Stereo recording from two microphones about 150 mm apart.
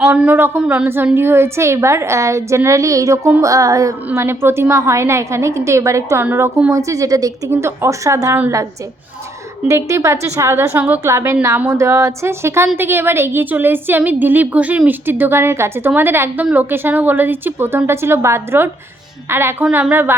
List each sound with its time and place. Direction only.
0.0 s a woman's voice: 15° right (ahead or behind)
9.6 s a woman's voice: 20° right (ahead or behind)